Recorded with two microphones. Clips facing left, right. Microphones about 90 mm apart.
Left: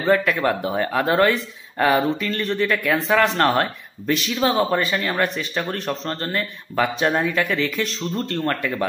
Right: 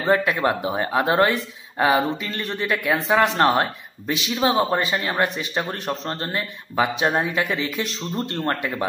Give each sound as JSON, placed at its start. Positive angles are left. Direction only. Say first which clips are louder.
{"t": 0.0, "sound": "speech", "louder": "left 1 dB", "side_deg": -20}
{"t": 6.7, "sound": "a man's voice", "louder": "even", "side_deg": -10}
{"t": 7.2, "sound": "a man's voice", "louder": "left 2 dB", "side_deg": -20}